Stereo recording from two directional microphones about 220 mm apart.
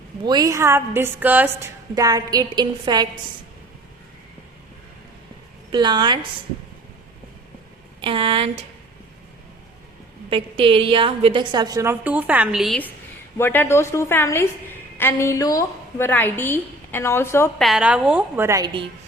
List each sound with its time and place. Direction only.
0.3 s a woman's voice: 15° right (ahead or behind)
5.7 s a woman's voice: 20° right (ahead or behind)
8.0 s a woman's voice: 25° right (ahead or behind)
10.2 s a woman's voice: 25° right (ahead or behind); by 17.5 s 10° left (ahead or behind)
17.6 s a woman's voice: centre (ahead or behind); by 18.9 s 20° right (ahead or behind)